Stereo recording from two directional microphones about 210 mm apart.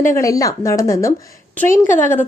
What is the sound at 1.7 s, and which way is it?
Speech, 40° left (ahead or behind).